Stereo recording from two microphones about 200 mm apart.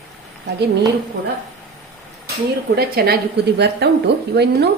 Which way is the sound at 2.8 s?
50° right (ahead or behind).